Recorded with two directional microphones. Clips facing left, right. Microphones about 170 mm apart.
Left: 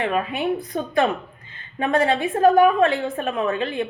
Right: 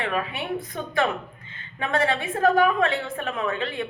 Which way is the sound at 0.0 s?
30° left (ahead or behind).